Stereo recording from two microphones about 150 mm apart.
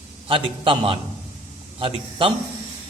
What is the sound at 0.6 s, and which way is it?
A man's voice, 35° right (ahead or behind).